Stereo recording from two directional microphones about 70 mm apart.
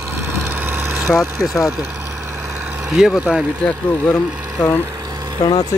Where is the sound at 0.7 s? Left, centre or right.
Right.